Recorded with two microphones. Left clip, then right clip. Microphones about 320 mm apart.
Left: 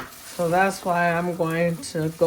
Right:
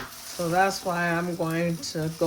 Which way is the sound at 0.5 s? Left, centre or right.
Left.